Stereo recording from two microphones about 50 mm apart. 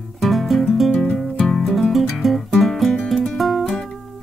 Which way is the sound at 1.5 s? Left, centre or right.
Centre.